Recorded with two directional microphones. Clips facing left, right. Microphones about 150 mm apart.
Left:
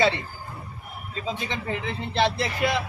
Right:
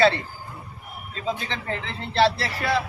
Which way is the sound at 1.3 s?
15° left (ahead or behind).